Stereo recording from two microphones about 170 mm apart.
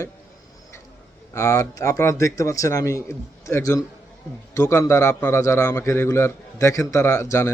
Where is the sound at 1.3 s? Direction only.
20° left (ahead or behind).